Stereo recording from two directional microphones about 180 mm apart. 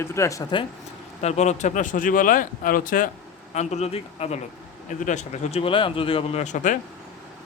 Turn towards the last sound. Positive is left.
turn(degrees=45)  # may be behind; listen again after turning